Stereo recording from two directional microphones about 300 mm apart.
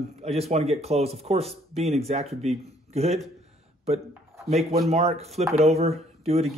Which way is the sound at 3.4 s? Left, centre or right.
Right.